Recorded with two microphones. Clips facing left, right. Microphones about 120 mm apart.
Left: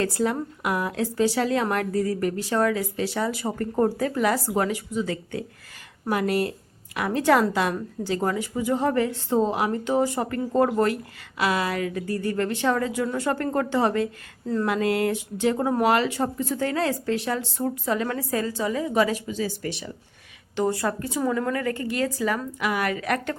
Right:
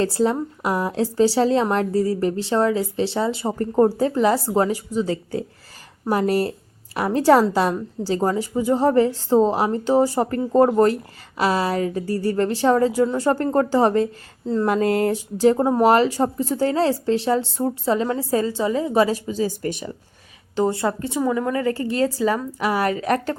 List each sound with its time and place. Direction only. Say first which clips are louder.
0.0 s a woman's voice: right 4 dB; 30° right (ahead or behind)
14.7 s a woman's voice: right 4 dB; 40° right (ahead or behind)
20.6 s a woman's voice: right 4 dB; 25° right (ahead or behind)
21.7 s a woman's voice: right 5 dB; 30° right (ahead or behind)